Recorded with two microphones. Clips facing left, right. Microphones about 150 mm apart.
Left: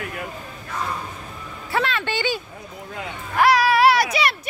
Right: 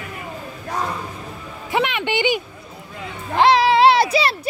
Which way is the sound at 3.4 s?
25° right (ahead or behind).